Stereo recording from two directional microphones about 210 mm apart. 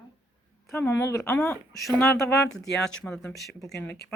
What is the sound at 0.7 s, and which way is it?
Speech, 10° left (ahead or behind).